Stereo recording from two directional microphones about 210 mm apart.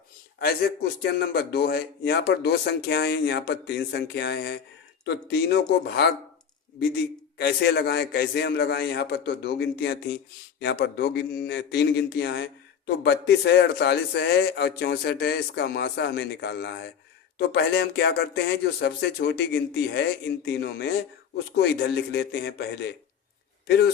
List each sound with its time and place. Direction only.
0.3 s speech: 50° left (ahead or behind)